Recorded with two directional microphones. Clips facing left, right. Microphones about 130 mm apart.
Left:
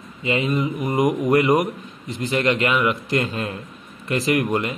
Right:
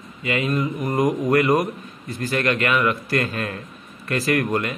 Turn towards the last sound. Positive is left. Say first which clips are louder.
# left 1 dB
turn(degrees=20)  # may be behind; listen again after turning